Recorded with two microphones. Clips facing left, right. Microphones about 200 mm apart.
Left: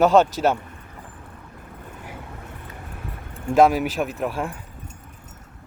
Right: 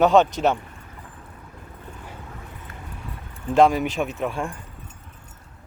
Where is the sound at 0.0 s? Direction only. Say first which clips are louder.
Even; centre (ahead or behind).